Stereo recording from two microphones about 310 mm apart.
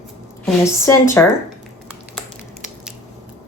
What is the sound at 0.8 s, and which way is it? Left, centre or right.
Speech, centre.